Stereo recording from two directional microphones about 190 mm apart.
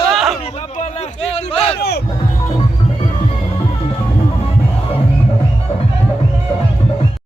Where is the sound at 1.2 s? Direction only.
35° left (ahead or behind).